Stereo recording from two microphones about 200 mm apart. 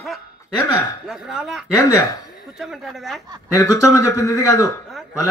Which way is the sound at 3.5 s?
15° left (ahead or behind).